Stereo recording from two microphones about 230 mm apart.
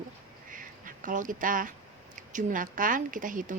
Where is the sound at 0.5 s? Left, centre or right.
Right.